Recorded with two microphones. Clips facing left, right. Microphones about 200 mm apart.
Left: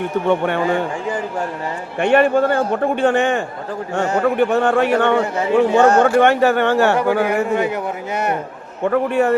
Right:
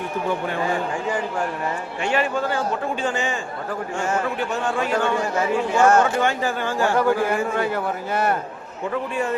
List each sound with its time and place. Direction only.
0.3 s a man's voice: 70° left (ahead or behind)
2.0 s a man's voice: 55° left (ahead or behind)
5.2 s speech: 20° left (ahead or behind)
5.5 s a man's voice: 65° left (ahead or behind)
7.5 s speech: 20° left (ahead or behind)
8.8 s a man's voice: 65° left (ahead or behind)